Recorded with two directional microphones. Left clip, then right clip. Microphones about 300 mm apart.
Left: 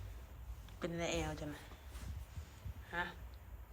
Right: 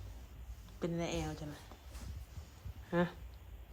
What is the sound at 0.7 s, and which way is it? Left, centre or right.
Speech, centre.